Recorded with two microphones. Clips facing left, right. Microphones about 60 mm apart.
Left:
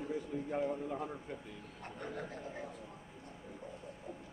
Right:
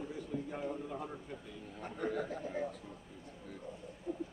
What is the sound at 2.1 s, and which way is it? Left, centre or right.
Speech, right.